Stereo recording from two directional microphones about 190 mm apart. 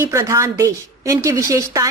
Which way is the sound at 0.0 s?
15° right (ahead or behind).